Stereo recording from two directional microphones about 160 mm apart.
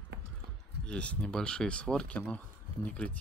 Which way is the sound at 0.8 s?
5° left (ahead or behind).